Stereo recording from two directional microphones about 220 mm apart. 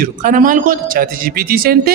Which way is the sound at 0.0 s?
35° right (ahead or behind).